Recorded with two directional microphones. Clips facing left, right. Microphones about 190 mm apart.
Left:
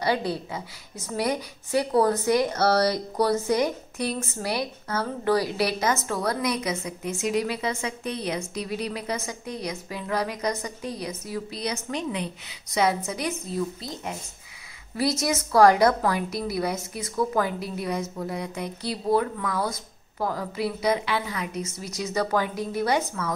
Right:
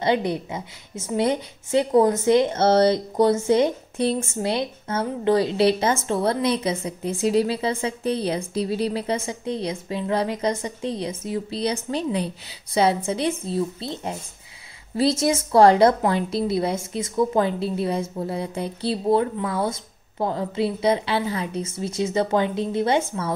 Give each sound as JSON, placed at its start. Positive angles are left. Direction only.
{"t": 0.0, "sound": "a woman's voice", "side_deg": -20}